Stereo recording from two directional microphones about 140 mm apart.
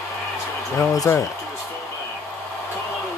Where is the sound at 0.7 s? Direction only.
20° left (ahead or behind).